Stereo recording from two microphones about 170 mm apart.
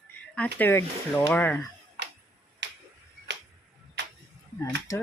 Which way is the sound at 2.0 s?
90° right.